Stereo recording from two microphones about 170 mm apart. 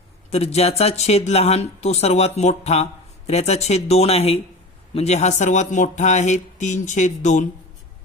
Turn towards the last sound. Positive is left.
turn(degrees=45)  # may be behind; listen again after turning